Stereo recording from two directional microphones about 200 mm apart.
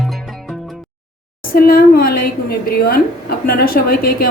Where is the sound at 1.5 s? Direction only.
45° left (ahead or behind).